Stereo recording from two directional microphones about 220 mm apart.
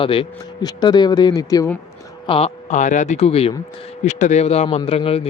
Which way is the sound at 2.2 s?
25° left (ahead or behind).